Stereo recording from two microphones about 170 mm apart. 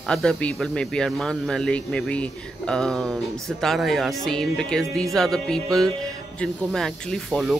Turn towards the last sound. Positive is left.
turn(degrees=0)  # may be behind; listen again after turning